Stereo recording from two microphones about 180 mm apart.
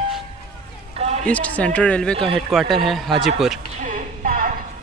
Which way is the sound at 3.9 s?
50° right (ahead or behind).